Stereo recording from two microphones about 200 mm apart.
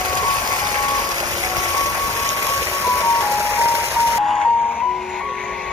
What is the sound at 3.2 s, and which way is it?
Music, 15° right (ahead or behind).